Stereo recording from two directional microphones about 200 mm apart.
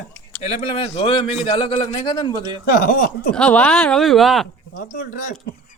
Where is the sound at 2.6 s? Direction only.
50° left (ahead or behind).